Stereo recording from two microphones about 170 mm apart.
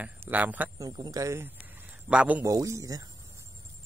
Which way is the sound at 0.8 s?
20° right (ahead or behind).